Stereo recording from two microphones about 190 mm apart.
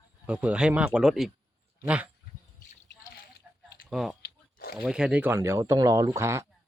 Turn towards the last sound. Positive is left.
turn(degrees=-15)  # may be behind; listen again after turning